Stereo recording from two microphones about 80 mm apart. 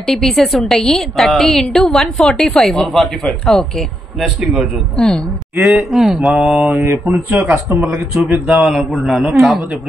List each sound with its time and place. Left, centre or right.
0.0 s a woman's voice: centre
4.9 s speech: centre
5.6 s a woman's voice: centre
6.8 s speech: right
8.5 s a woman's voice: centre